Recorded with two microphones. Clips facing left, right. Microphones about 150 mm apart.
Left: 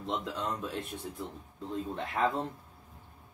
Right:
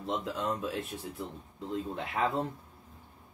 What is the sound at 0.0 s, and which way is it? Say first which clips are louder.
Speech: right 1 dB; centre (ahead or behind).